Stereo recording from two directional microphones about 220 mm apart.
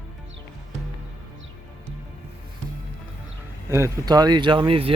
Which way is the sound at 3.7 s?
15° right (ahead or behind).